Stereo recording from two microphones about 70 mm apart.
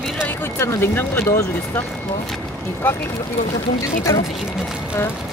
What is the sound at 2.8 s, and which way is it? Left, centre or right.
Speech, left.